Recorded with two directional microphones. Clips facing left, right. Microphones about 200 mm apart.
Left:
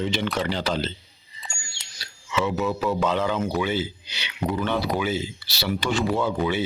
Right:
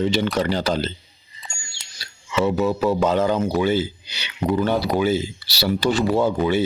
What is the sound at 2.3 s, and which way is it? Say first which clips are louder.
Speech: right 5 dB; 40° right (ahead or behind).